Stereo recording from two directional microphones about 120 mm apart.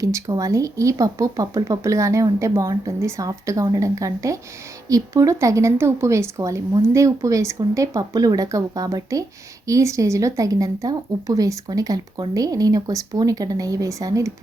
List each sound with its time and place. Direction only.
0.0 s speech: 30° right (ahead or behind)